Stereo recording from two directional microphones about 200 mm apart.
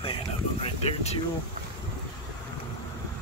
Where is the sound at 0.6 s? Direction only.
30° left (ahead or behind).